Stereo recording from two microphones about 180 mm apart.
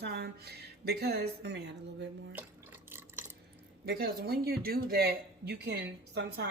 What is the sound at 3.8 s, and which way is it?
Speech, 60° right (ahead or behind).